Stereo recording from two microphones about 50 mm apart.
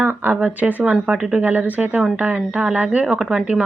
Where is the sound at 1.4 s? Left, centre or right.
Right.